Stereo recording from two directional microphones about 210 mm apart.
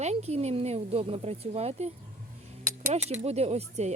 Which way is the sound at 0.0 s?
30° right (ahead or behind).